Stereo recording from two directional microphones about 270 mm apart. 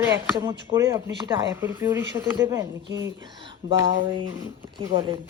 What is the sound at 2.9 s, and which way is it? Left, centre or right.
Speech, right.